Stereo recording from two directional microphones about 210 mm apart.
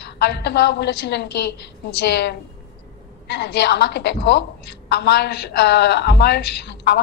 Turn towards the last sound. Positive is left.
turn(degrees=55)  # may be behind; listen again after turning